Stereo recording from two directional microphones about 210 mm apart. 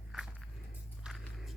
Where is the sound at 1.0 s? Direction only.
Centre (ahead or behind).